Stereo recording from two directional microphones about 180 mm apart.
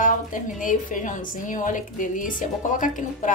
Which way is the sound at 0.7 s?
45° left (ahead or behind).